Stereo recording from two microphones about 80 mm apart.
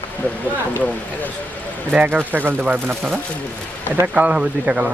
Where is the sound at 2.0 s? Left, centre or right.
Right.